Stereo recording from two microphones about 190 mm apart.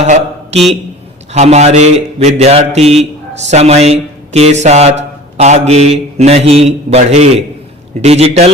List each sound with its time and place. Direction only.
0.0 s mantra: 35° right (ahead or behind)
1.3 s a man's voice: 35° right (ahead or behind)